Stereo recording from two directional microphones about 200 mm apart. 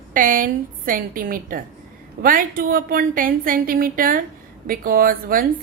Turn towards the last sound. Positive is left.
turn(degrees=-45)  # may be behind; listen again after turning